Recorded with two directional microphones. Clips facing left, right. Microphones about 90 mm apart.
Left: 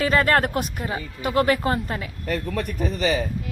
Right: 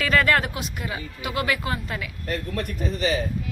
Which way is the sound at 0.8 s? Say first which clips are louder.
Left 4 dB; 35° left (ahead or behind).